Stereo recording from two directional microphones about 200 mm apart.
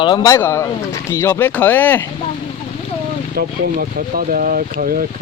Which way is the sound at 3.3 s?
45° right (ahead or behind).